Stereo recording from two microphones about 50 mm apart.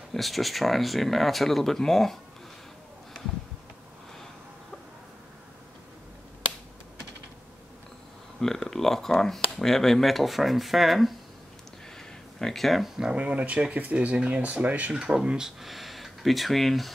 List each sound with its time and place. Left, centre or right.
0.1 s speech: centre
8.4 s speech: centre
12.4 s speech: centre
13.1 s speech: right
15.0 s speech: centre